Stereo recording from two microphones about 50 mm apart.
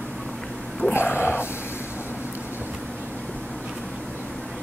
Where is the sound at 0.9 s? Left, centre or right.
Left.